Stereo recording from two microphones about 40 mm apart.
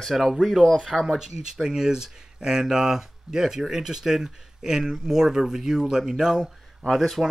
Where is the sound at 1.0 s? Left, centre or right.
Centre.